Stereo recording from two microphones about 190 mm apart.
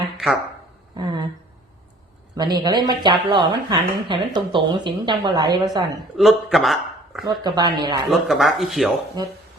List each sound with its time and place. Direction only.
0.2 s speech: centre (ahead or behind)
0.9 s speech: 20° right (ahead or behind)
2.3 s speech: 20° right (ahead or behind)
6.1 s a man's voice: centre (ahead or behind)
7.3 s speech: 20° right (ahead or behind)
8.1 s speech: centre (ahead or behind)